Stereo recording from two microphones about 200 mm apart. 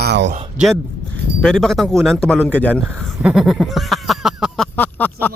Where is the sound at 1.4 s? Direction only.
Centre (ahead or behind).